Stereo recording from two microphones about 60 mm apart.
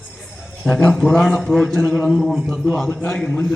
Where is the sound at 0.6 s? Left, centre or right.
Centre.